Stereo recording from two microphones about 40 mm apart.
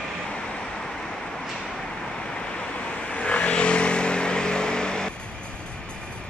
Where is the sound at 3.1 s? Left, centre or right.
Left.